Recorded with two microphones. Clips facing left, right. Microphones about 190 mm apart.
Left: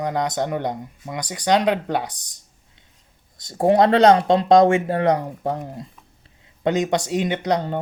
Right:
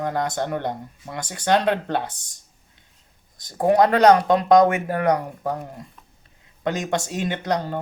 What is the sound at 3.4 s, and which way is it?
Speech, 25° left (ahead or behind).